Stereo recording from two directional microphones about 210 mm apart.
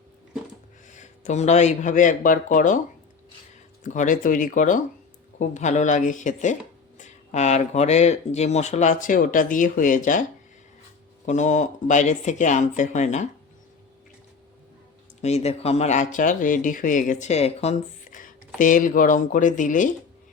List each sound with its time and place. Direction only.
0.9 s speech: 35° left (ahead or behind)
3.8 s speech: 40° left (ahead or behind)
11.3 s speech: 35° left (ahead or behind)
15.2 s speech: 30° left (ahead or behind)